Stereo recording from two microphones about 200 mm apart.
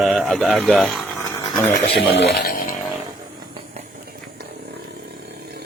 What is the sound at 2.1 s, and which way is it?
Speech, 50° left (ahead or behind).